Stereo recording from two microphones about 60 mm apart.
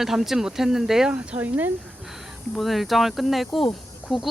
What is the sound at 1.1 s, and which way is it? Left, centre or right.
Speech, right.